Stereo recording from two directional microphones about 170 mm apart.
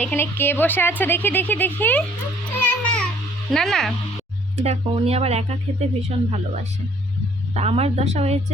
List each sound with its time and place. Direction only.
0.0 s a woman's voice: 10° left (ahead or behind)
2.6 s music: 10° left (ahead or behind)
3.5 s speech: 5° left (ahead or behind)
4.5 s speech: 40° right (ahead or behind)